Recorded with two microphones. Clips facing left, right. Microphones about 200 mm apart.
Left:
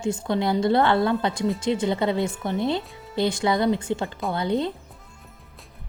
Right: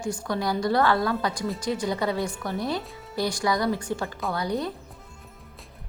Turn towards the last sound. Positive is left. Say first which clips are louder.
# left 3 dB
turn(degrees=25)  # may be behind; listen again after turning